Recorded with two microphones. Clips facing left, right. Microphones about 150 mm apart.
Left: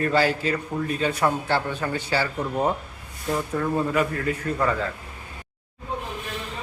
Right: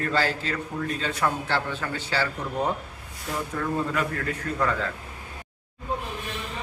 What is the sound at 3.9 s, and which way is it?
Speech, 10° left (ahead or behind).